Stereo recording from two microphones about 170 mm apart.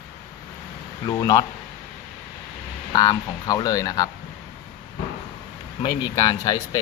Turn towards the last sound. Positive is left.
turn(degrees=20)  # may be behind; listen again after turning